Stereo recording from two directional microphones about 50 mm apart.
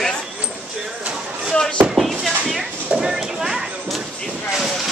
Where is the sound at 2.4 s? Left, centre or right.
Centre.